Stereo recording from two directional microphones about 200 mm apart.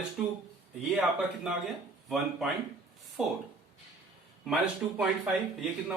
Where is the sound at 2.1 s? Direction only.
Centre (ahead or behind).